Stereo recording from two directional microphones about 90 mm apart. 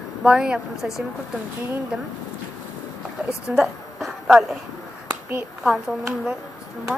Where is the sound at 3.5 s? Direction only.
5° right (ahead or behind).